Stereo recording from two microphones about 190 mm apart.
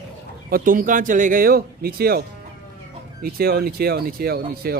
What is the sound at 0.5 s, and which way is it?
Speech, 50° right (ahead or behind).